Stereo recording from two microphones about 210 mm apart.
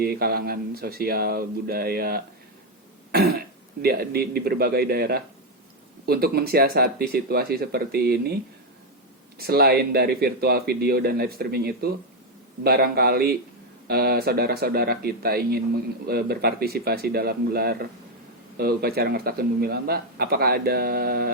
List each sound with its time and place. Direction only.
0.0 s speech: 45° right (ahead or behind)
9.4 s speech: 50° right (ahead or behind)